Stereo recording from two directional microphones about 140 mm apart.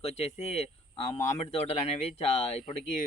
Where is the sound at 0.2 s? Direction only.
50° left (ahead or behind).